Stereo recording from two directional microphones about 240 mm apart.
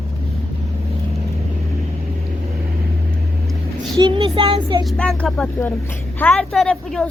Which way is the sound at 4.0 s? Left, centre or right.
Right.